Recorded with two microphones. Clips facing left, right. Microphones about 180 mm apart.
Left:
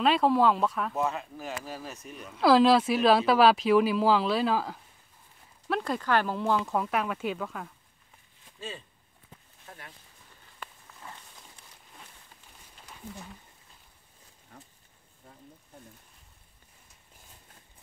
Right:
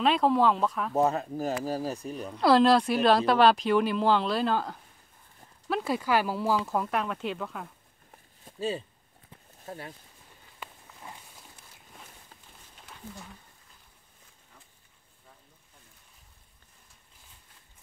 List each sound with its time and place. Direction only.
0.0 s speech: centre (ahead or behind)
0.9 s speech: 40° right (ahead or behind)
2.3 s speech: centre (ahead or behind)
8.1 s walk: 40° right (ahead or behind)
9.7 s speech: 35° right (ahead or behind)
10.6 s a sound: 15° right (ahead or behind)
12.8 s wild animals: centre (ahead or behind)
14.5 s a sound: 60° left (ahead or behind)